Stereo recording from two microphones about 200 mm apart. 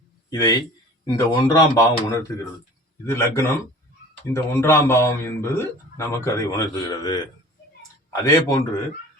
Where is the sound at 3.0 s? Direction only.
15° left (ahead or behind).